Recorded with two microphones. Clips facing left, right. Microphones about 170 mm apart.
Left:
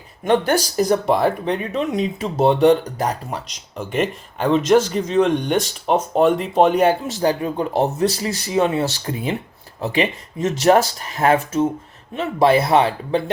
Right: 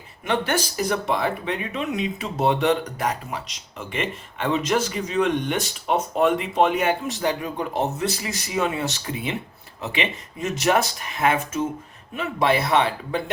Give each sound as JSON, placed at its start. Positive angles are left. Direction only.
{"t": 0.3, "sound": "speech", "side_deg": 40}